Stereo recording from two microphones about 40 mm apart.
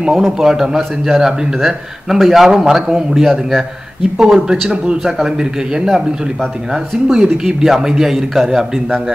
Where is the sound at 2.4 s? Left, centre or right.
Centre.